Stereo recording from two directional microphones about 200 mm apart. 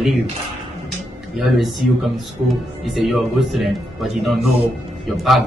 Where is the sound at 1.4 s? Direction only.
Centre (ahead or behind).